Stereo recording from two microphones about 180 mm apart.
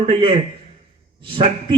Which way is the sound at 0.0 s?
30° right (ahead or behind).